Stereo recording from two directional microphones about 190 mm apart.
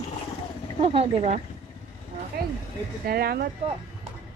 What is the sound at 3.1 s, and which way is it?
Speech, 55° right (ahead or behind).